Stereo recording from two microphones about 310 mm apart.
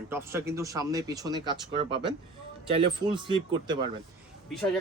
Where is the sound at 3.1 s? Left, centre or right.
Centre.